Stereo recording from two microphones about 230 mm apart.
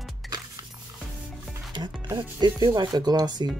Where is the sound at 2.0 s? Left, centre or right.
Centre.